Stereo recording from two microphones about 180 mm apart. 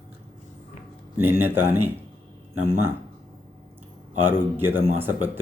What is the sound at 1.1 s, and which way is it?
Speech, 10° right (ahead or behind).